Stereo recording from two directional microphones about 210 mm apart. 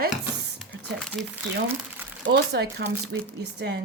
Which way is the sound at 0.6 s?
5° right (ahead or behind).